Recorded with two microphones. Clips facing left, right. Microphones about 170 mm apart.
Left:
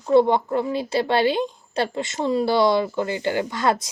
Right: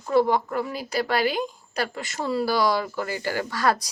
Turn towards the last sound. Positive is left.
turn(degrees=20)  # may be behind; listen again after turning